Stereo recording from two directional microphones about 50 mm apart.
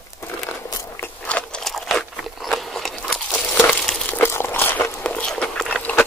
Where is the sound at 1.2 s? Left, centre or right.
Left.